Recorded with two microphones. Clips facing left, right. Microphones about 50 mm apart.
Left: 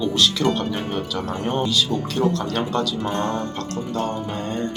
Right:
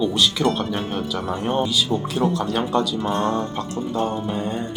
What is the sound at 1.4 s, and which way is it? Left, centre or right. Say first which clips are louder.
Speech: right 2 dB; right.